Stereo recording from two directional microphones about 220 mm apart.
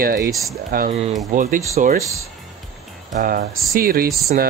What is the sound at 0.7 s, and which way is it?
Speech, 40° right (ahead or behind).